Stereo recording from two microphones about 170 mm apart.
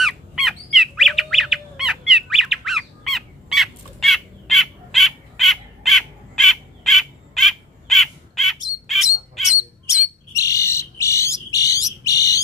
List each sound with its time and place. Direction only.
0.0 s bird: centre (ahead or behind)
10.3 s bird: 20° left (ahead or behind)